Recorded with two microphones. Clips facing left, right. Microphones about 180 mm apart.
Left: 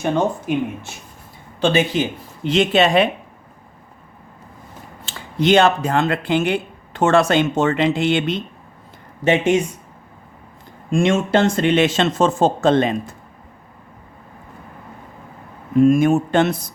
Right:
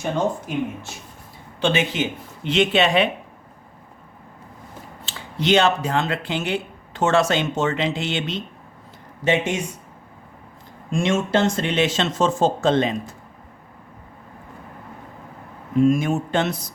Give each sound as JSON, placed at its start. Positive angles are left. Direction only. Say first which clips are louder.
{"t": 0.0, "sound": "speech", "louder": "left 4 dB", "side_deg": 60}
{"t": 1.6, "sound": "speech", "louder": "left 4 dB", "side_deg": 35}
{"t": 5.0, "sound": "speech", "louder": "left 4 dB", "side_deg": 50}
{"t": 10.9, "sound": "speech", "louder": "left 4 dB", "side_deg": 55}
{"t": 15.8, "sound": "speech", "louder": "left 5 dB", "side_deg": 50}